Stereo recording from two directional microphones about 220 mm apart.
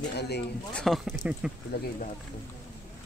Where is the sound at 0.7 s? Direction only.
Centre (ahead or behind).